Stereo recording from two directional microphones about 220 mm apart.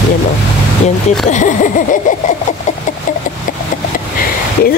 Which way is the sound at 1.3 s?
35° left (ahead or behind).